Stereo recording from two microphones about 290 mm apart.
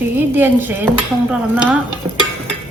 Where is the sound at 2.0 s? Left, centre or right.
Centre.